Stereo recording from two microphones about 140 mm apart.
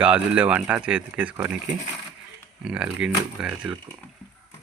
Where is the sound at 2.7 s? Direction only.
5° right (ahead or behind).